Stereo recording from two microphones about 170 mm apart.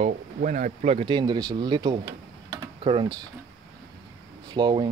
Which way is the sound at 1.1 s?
25° right (ahead or behind).